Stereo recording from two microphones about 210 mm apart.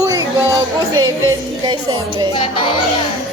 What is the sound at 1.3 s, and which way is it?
Speech, 20° right (ahead or behind).